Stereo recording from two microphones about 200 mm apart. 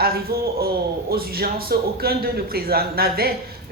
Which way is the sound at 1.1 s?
50° right (ahead or behind).